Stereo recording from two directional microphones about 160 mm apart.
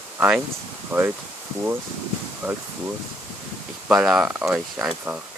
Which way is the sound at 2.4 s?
15° right (ahead or behind).